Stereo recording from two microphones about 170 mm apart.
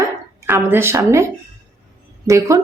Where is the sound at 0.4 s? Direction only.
15° right (ahead or behind).